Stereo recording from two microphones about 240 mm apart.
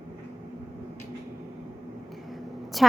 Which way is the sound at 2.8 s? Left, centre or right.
Centre.